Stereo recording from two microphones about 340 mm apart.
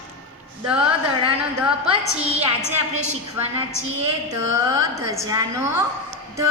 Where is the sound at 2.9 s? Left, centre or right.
Centre.